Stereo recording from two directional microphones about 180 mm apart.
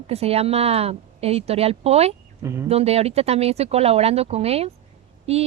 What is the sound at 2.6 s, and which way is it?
Speech, 35° right (ahead or behind).